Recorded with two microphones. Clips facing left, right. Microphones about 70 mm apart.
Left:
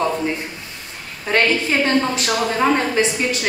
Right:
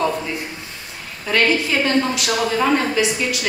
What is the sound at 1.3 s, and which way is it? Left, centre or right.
A woman's voice, left.